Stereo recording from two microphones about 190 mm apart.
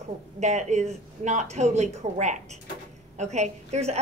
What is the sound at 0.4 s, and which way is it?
A woman's voice, 35° right (ahead or behind).